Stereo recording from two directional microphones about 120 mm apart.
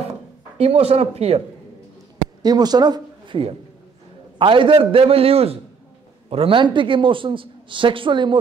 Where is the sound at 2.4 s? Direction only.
35° right (ahead or behind).